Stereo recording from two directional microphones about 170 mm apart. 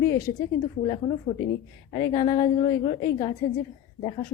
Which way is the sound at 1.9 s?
25° left (ahead or behind).